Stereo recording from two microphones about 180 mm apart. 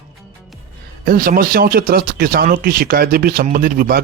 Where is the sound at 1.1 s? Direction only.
55° right (ahead or behind).